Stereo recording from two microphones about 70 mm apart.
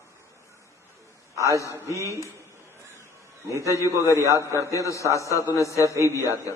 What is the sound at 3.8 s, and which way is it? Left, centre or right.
Speech, right.